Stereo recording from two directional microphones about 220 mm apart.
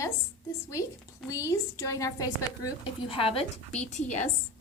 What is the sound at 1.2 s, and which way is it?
A woman's voice, 15° left (ahead or behind).